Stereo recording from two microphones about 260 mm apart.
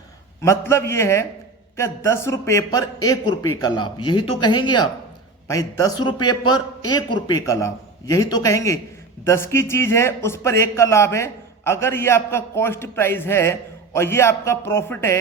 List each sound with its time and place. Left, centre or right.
0.4 s a man's voice: centre